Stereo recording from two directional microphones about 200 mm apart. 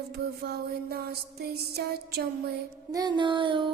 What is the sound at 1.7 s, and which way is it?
Music, 50° right (ahead or behind).